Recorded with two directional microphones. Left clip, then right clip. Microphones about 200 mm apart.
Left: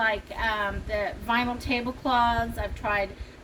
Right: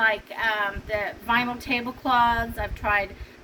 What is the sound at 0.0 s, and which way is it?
A woman's voice, 10° left (ahead or behind).